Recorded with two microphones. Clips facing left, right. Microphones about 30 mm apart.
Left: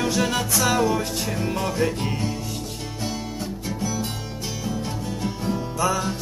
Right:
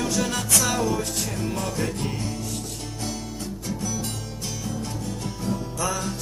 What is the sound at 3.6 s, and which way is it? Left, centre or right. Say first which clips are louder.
Music: left 2 dB; centre.